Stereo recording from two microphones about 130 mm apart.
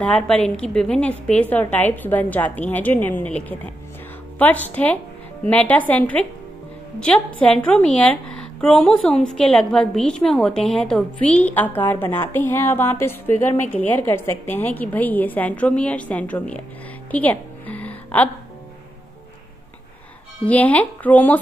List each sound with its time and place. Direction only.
0.0 s a woman's voice: 10° left (ahead or behind)
7.3 s a woman's voice: 5° left (ahead or behind)
17.1 s music: 10° left (ahead or behind)
20.4 s a woman's voice: 10° left (ahead or behind)